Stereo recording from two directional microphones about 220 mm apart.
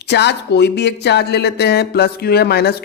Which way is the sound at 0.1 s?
50° left (ahead or behind).